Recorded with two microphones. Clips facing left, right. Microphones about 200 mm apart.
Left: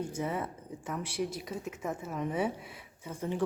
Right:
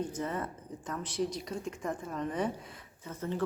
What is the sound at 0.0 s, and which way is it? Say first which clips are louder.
Speech: left 1 dB; 10° left (ahead or behind).